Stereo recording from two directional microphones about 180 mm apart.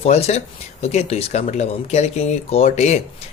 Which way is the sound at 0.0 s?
35° left (ahead or behind).